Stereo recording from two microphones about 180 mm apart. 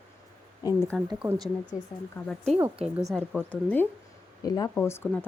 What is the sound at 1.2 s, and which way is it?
Speech, centre (ahead or behind).